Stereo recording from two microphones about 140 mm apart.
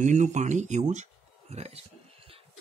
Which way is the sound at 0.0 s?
60° right (ahead or behind).